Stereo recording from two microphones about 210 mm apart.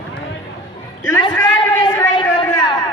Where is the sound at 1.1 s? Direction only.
20° left (ahead or behind).